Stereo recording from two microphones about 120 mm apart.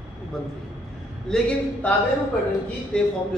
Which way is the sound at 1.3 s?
10° left (ahead or behind).